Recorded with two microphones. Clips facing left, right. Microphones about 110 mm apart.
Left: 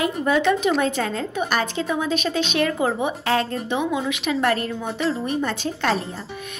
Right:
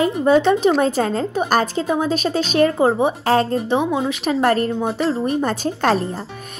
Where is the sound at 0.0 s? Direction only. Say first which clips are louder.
Right 5 dB; 30° right (ahead or behind).